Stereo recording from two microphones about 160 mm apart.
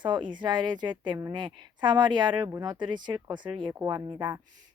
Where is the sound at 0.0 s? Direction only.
30° right (ahead or behind).